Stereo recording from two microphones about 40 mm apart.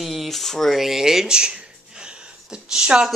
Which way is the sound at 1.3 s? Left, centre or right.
Right.